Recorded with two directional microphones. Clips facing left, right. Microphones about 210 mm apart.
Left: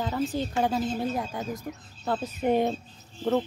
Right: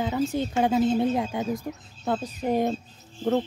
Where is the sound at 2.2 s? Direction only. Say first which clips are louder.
Left 2 dB; centre (ahead or behind).